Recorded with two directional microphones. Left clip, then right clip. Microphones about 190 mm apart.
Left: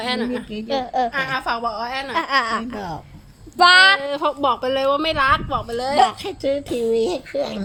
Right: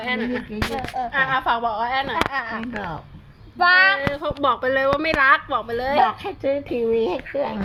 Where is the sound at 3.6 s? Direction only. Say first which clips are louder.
Left 4 dB; 85° left.